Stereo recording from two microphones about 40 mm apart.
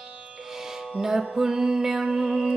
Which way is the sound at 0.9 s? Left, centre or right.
Centre.